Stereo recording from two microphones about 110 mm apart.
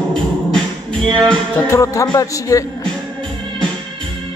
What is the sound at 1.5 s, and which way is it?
Speech, 25° left (ahead or behind).